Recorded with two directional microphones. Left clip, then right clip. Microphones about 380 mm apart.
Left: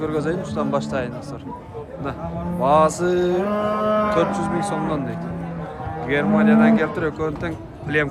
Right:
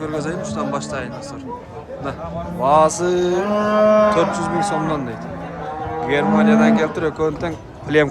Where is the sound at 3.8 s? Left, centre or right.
Right.